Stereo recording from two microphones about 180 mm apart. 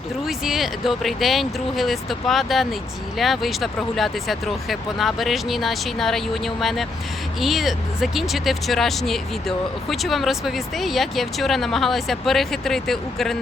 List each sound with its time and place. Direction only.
0.3 s speech: centre (ahead or behind)